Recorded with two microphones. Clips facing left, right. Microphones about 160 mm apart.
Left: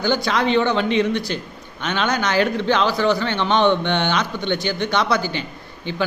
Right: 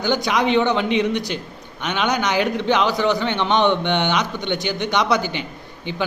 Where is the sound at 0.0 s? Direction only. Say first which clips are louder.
Even; 15° right (ahead or behind).